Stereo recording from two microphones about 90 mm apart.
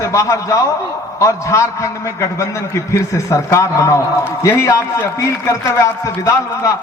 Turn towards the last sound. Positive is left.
turn(degrees=35)  # may be behind; listen again after turning